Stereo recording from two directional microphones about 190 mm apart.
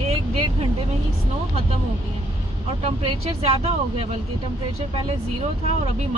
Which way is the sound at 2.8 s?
35° right (ahead or behind).